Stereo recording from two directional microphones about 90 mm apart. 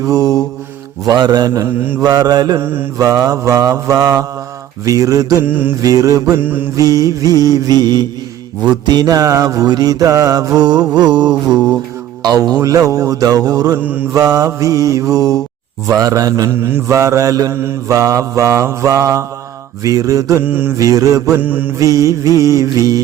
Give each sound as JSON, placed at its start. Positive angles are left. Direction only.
{"t": 0.0, "sound": "mantra", "side_deg": -45}
{"t": 2.6, "sound": "mantra", "side_deg": -25}
{"t": 3.0, "sound": "mantra", "side_deg": -40}
{"t": 5.4, "sound": "mantra", "side_deg": -25}
{"t": 5.8, "sound": "mantra", "side_deg": -40}
{"t": 6.4, "sound": "mantra", "side_deg": -20}
{"t": 6.7, "sound": "mantra", "side_deg": -40}
{"t": 13.7, "sound": "mantra", "side_deg": -20}
{"t": 14.1, "sound": "mantra", "side_deg": -40}
{"t": 16.5, "sound": "mantra", "side_deg": -25}
{"t": 20.4, "sound": "mantra", "side_deg": -20}
{"t": 20.7, "sound": "mantra", "side_deg": -40}
{"t": 21.4, "sound": "mantra", "side_deg": -20}
{"t": 21.8, "sound": "mantra", "side_deg": -40}